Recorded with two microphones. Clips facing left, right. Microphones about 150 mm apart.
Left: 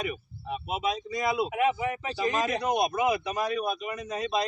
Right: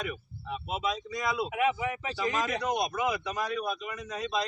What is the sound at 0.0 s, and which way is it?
Speech, 10° left (ahead or behind).